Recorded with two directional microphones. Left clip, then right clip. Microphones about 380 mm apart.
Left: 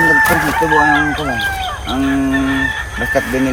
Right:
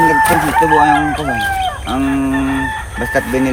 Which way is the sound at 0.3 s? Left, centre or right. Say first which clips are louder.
Right 2 dB; centre.